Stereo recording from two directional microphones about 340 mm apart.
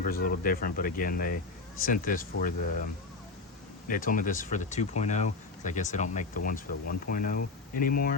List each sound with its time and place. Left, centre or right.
0.0 s speech: left
3.8 s speech: left